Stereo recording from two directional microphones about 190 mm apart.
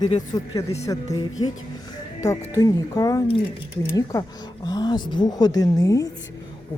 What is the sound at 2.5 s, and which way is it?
Speech, 15° left (ahead or behind).